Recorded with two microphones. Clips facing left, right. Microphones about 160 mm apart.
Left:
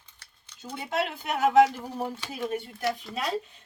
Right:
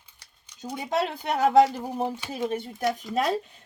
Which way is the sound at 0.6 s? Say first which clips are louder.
Right 3 dB; 15° right (ahead or behind).